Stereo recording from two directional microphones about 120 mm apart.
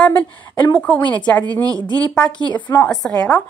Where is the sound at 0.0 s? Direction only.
15° left (ahead or behind).